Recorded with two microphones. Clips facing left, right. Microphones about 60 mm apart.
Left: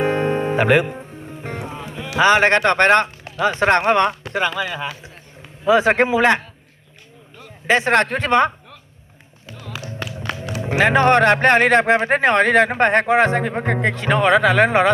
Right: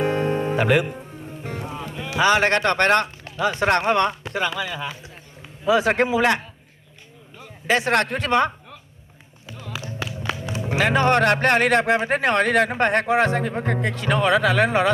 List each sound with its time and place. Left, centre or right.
0.0 s music: left
2.1 s speech: left
7.7 s speech: left
10.6 s speech: left
13.4 s speech: left